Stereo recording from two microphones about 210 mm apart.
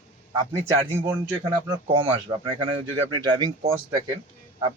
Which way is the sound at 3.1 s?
20° right (ahead or behind).